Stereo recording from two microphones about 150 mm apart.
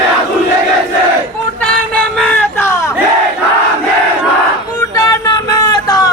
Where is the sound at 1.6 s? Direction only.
5° left (ahead or behind).